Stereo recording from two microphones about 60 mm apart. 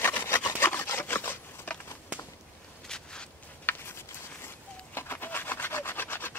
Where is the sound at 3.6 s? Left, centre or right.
Left.